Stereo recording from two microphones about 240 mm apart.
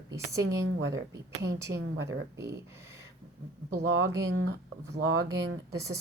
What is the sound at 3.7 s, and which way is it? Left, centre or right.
Speech, right.